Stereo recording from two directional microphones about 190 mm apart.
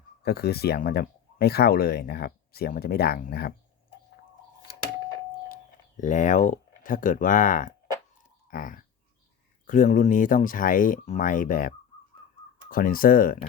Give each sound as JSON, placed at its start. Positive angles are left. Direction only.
{"t": 0.2, "sound": "speech", "side_deg": 55}
{"t": 6.0, "sound": "speech", "side_deg": 40}
{"t": 8.4, "sound": "a sound", "side_deg": 45}
{"t": 9.6, "sound": "speech", "side_deg": 45}
{"t": 12.7, "sound": "speech", "side_deg": 45}